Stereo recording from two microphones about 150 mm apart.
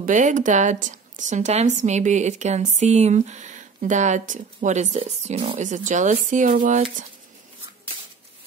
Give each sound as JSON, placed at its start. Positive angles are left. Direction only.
{"t": 0.0, "sound": "a woman's voice", "side_deg": -55}